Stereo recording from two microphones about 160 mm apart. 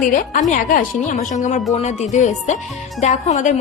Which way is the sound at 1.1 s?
50° left (ahead or behind).